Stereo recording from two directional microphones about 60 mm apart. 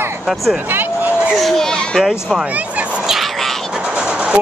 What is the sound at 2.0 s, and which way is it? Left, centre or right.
Speech, centre.